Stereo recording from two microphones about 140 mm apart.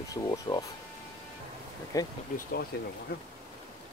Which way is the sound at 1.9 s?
25° left (ahead or behind).